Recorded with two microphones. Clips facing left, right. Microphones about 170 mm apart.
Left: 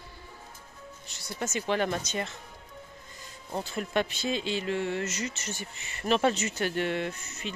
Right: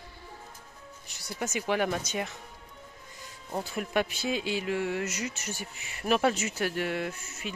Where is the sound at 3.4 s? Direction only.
10° right (ahead or behind).